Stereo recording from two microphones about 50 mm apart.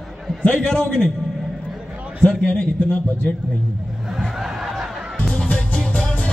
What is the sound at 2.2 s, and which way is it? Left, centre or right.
Speech, left.